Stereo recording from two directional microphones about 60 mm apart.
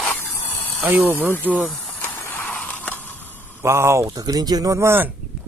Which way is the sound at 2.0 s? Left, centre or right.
Left.